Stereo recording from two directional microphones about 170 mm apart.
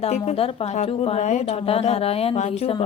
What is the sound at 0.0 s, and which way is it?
Speech, 40° left (ahead or behind).